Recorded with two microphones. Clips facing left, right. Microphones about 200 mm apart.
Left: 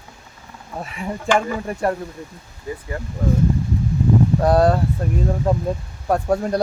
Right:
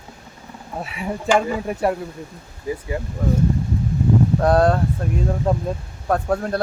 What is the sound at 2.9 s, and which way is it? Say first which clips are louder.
Speech: right 3 dB; 15° right (ahead or behind).